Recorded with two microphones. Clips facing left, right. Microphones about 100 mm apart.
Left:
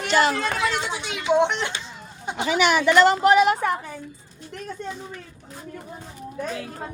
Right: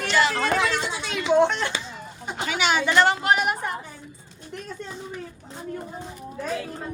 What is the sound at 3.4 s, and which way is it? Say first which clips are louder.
Speech: left 6 dB; 90° left.